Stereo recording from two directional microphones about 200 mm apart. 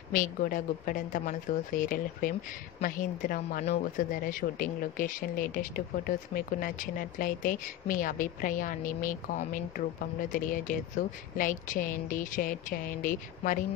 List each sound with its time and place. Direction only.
0.1 s speech: 40° left (ahead or behind)